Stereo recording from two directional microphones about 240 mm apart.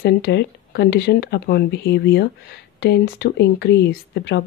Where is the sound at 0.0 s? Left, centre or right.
Left.